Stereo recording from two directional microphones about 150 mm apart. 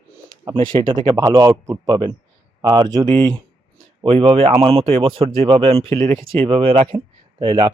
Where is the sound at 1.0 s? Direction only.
25° right (ahead or behind).